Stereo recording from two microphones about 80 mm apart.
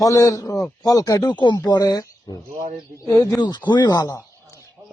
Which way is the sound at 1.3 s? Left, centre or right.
Left.